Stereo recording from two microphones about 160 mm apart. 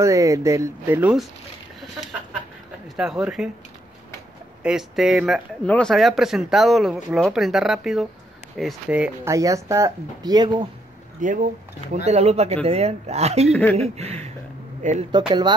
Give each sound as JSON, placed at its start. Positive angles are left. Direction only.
{"t": 0.0, "sound": "speech", "side_deg": -20}
{"t": 3.0, "sound": "speech", "side_deg": -5}
{"t": 4.6, "sound": "speech", "side_deg": -5}
{"t": 9.3, "sound": "speech", "side_deg": -20}
{"t": 11.1, "sound": "speech", "side_deg": -55}
{"t": 11.9, "sound": "speech", "side_deg": -45}
{"t": 13.5, "sound": "speech", "side_deg": 10}
{"t": 13.7, "sound": "speech", "side_deg": -40}
{"t": 15.0, "sound": "speech", "side_deg": -30}